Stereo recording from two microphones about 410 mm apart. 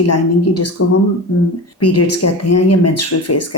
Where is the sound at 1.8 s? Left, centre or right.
Left.